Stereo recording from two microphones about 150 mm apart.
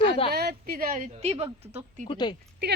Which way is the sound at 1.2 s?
45° right (ahead or behind).